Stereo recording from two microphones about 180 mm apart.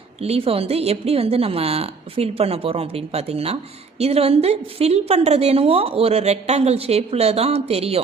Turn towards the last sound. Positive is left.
turn(degrees=-35)  # may be behind; listen again after turning